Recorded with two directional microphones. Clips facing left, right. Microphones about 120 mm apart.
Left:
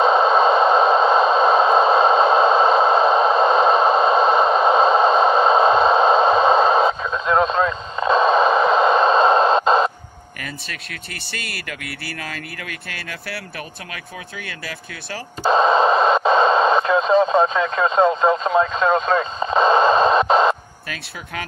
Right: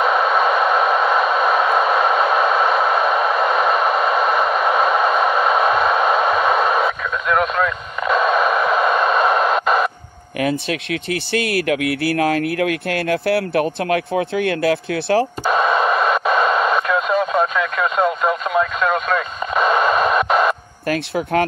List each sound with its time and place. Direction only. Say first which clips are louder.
0.0 s a sound: left 2 dB; 25° left (ahead or behind)
11.3 s speech: right 14 dB; 55° right (ahead or behind)
15.4 s radio: left 2 dB; 25° left (ahead or behind)
20.9 s speech: right 13 dB; 55° right (ahead or behind)